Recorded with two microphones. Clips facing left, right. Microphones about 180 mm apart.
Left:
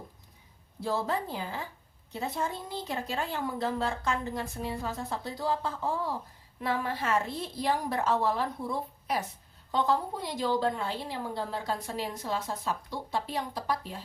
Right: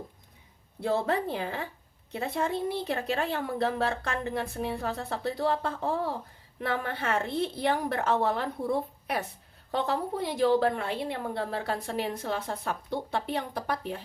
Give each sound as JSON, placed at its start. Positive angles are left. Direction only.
{"t": 0.8, "sound": "a woman's voice", "side_deg": -60}